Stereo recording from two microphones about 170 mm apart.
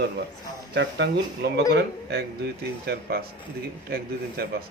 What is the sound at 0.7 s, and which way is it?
A man's voice, 90° right.